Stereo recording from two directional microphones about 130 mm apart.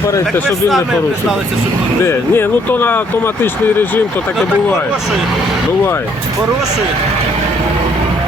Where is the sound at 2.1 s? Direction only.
15° left (ahead or behind).